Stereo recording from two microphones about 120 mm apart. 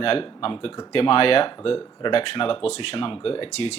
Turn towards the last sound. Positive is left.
turn(degrees=50)  # may be behind; listen again after turning